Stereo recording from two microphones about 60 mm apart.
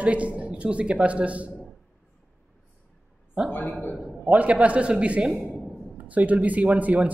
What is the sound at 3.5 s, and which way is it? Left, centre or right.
Speech, left.